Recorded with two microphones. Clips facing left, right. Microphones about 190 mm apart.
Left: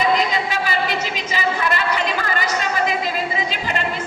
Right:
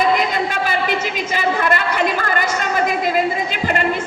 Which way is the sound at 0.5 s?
55° right (ahead or behind).